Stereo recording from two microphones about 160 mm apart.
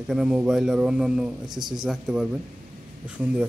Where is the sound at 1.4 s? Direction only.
25° right (ahead or behind).